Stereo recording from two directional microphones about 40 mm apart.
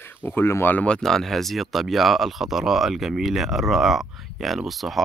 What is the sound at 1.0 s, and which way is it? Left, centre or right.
Speech, centre.